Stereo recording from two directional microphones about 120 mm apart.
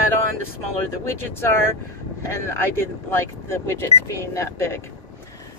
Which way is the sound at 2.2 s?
20° left (ahead or behind).